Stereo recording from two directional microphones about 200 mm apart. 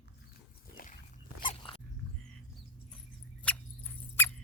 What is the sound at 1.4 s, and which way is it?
Dog, 25° left (ahead or behind).